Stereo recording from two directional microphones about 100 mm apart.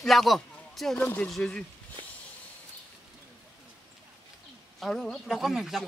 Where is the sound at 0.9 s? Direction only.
25° left (ahead or behind).